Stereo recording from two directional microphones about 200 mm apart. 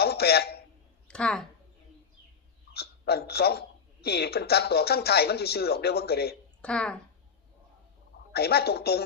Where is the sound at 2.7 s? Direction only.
50° left (ahead or behind).